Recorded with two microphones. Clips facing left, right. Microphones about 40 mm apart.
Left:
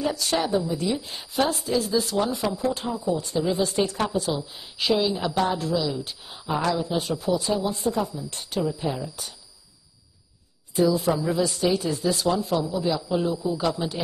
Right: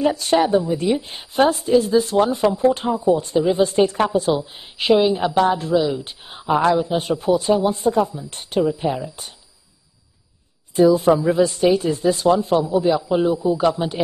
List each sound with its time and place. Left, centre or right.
0.0 s a woman's voice: right
10.8 s a woman's voice: right
11.6 s a man's voice: right
11.9 s a woman's voice: right
12.4 s a man's voice: right